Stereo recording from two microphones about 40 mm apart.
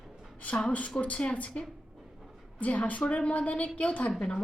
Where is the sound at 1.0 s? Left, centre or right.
Left.